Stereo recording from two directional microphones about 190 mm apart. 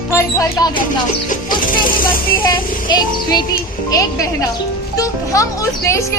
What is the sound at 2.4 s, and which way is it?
Music, 25° left (ahead or behind).